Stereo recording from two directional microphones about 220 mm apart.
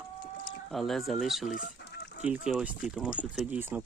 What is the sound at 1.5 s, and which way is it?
Chicken, 40° left (ahead or behind).